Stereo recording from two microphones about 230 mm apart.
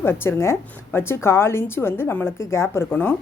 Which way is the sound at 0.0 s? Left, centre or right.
Centre.